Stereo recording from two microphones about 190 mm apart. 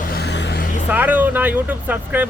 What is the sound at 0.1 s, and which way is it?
Vehicle, 60° left (ahead or behind).